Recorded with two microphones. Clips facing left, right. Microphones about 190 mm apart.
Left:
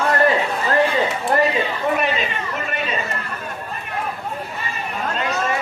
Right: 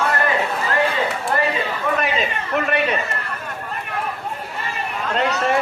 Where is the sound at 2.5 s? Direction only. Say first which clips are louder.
Right 8 dB; 70° right (ahead or behind).